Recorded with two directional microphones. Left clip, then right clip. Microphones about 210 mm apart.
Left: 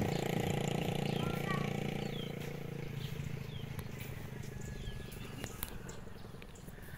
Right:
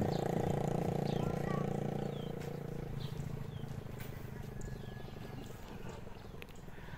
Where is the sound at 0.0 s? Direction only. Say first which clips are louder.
Right 1 dB; 25° right (ahead or behind).